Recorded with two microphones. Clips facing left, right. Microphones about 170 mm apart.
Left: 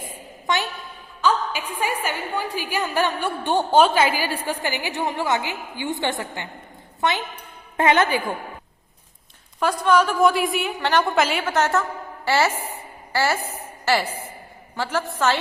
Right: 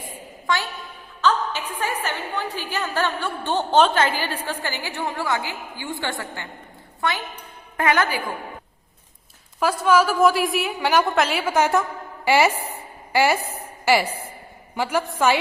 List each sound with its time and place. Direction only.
0.4 s a woman's voice: 20° left (ahead or behind)
7.8 s a woman's voice: 25° left (ahead or behind)
9.6 s a woman's voice: 5° right (ahead or behind)
11.0 s a woman's voice: centre (ahead or behind)